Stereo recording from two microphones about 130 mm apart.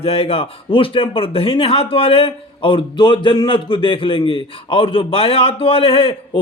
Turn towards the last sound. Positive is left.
turn(degrees=45)  # may be behind; listen again after turning